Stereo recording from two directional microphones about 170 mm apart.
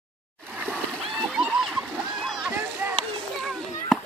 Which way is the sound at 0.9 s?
Centre (ahead or behind).